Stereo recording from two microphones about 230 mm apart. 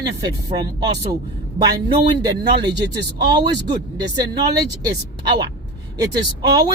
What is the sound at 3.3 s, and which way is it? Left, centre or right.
Speech, centre.